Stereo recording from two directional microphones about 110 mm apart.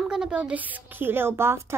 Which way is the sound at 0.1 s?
10° right (ahead or behind).